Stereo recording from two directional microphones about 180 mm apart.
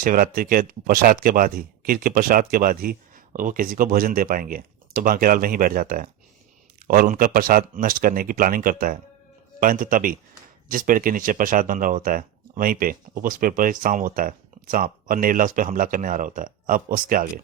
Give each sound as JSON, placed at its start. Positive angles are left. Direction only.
{"t": 0.0, "sound": "speech", "side_deg": -50}